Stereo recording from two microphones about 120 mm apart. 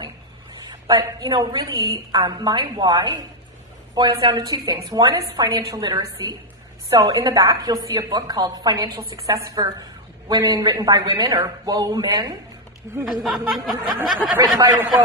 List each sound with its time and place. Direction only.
0.0 s a woman's voice: 35° right (ahead or behind)
12.9 s speech: 25° right (ahead or behind)
13.2 s speech: centre (ahead or behind)
14.4 s a woman's voice: 30° right (ahead or behind)